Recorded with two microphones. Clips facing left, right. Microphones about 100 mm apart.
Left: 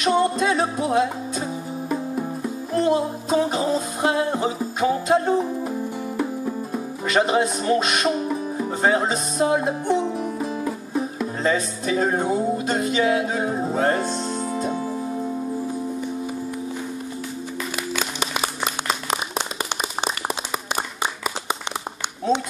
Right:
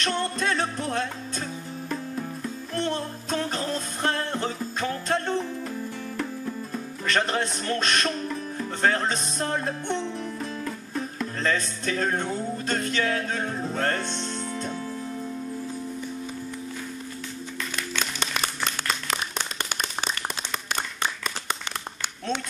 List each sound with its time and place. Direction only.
0.0 s music: 10° left (ahead or behind)
6.4 s speech: 10° left (ahead or behind)
14.7 s music: 20° left (ahead or behind)
17.9 s music: 10° left (ahead or behind)